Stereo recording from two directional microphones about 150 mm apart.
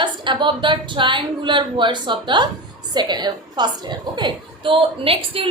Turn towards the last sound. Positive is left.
turn(degrees=-40)  # may be behind; listen again after turning